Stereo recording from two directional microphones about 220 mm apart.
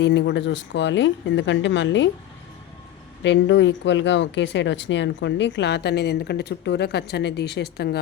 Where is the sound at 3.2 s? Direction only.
55° left (ahead or behind).